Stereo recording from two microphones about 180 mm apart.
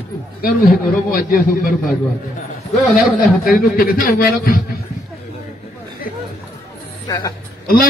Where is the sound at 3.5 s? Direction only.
55° left (ahead or behind).